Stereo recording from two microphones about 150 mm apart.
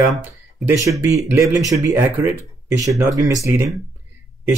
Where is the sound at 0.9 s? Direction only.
20° right (ahead or behind).